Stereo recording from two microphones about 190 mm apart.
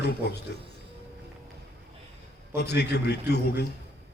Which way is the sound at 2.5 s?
60° left (ahead or behind).